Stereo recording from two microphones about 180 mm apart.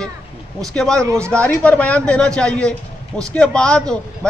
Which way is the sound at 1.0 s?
15° right (ahead or behind).